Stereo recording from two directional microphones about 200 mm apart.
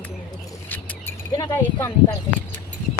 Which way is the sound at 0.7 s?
10° left (ahead or behind).